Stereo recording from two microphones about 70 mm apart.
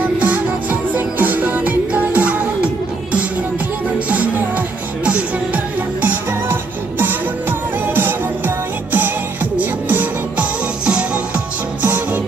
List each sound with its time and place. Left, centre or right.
0.2 s music: right